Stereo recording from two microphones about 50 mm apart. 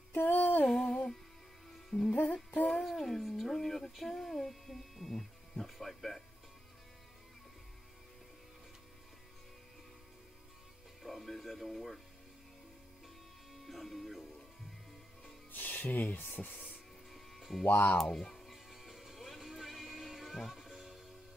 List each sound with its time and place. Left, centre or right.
0.1 s a sound: left
0.7 s music: centre
11.0 s music: centre
13.5 s music: centre
15.5 s music: left
17.4 s music: centre
17.6 s speech: left
18.0 s music: centre